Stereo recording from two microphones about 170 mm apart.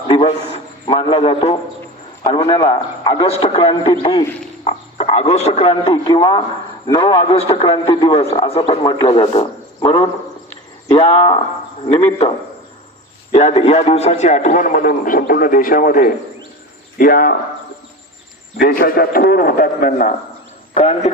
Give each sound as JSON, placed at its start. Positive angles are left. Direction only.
{"t": 0.1, "sound": "a man's voice", "side_deg": 35}
{"t": 13.3, "sound": "a man's voice", "side_deg": 35}
{"t": 18.6, "sound": "a man's voice", "side_deg": 60}
{"t": 20.7, "sound": "a man's voice", "side_deg": 35}